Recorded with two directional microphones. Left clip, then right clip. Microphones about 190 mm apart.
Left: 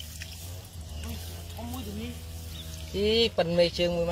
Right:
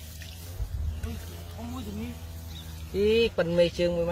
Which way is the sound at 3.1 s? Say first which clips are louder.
Even; 20° right (ahead or behind).